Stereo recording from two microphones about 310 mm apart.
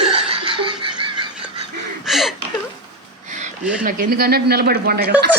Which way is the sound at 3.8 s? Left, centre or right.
Right.